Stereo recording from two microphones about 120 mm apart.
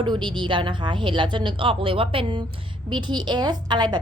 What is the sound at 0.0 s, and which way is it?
A woman's voice, 40° right (ahead or behind).